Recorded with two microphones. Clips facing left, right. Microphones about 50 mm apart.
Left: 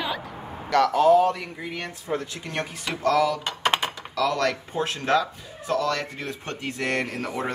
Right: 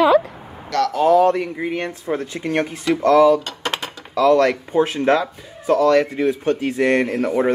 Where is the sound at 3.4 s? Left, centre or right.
Centre.